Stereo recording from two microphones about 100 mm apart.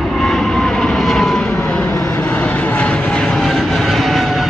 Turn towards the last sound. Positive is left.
turn(degrees=0)  # may be behind; listen again after turning